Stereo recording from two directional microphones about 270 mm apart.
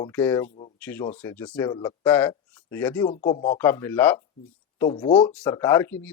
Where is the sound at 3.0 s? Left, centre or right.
Left.